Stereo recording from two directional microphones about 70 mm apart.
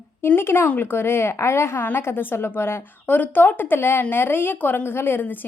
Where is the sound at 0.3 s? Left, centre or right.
Left.